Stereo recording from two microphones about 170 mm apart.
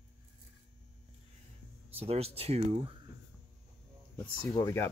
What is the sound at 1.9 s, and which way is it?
Speech, 35° right (ahead or behind).